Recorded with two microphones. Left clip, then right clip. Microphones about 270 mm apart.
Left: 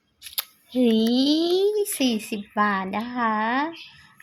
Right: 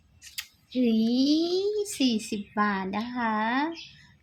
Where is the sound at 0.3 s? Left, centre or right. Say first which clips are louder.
Left 5 dB; centre.